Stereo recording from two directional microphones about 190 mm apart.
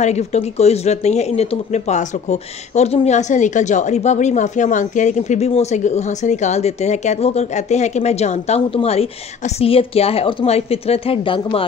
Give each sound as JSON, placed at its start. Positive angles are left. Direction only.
{"t": 0.0, "sound": "speech", "side_deg": 35}